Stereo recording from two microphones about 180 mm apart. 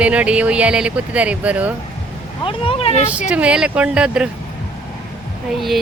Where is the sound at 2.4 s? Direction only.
30° left (ahead or behind).